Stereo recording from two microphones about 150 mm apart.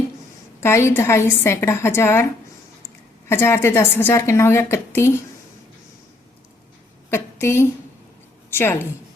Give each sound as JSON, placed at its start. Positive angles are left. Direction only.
{"t": 0.6, "sound": "a woman's voice", "side_deg": 20}
{"t": 3.2, "sound": "a woman's voice", "side_deg": 15}
{"t": 7.1, "sound": "a sound", "side_deg": 15}
{"t": 8.4, "sound": "a woman's voice", "side_deg": 15}